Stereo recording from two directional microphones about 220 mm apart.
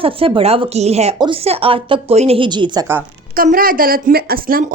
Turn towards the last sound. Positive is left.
turn(degrees=-40)  # may be behind; listen again after turning